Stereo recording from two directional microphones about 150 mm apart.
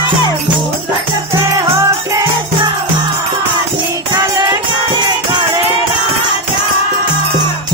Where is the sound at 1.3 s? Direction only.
20° right (ahead or behind).